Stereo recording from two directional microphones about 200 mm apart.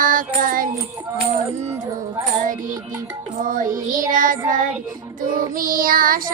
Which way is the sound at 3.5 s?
40° right (ahead or behind).